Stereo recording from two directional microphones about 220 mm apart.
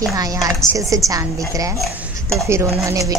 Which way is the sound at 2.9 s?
15° right (ahead or behind).